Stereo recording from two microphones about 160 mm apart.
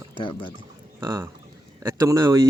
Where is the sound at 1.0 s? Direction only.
20° right (ahead or behind).